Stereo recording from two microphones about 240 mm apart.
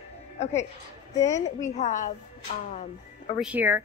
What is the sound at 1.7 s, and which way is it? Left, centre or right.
Speech, left.